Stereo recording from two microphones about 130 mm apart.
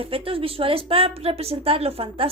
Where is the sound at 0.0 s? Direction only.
45° right (ahead or behind).